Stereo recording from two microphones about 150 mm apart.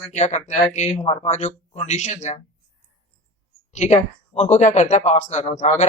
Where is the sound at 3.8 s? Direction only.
50° left (ahead or behind).